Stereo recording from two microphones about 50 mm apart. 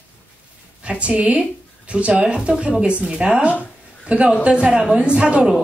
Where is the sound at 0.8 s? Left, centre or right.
Right.